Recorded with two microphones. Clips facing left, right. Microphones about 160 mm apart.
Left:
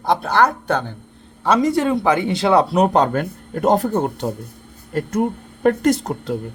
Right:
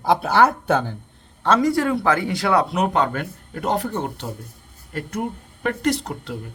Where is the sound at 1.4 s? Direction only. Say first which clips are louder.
Left 2 dB; 15° left (ahead or behind); by 4.2 s 45° left (ahead or behind).